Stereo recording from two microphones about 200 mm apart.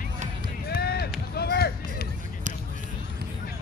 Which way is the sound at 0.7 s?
50° left (ahead or behind).